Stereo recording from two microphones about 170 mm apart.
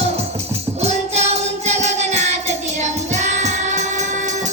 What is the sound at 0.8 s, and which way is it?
Music, 40° right (ahead or behind).